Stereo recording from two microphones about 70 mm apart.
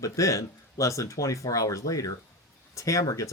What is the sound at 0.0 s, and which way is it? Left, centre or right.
Speech, left.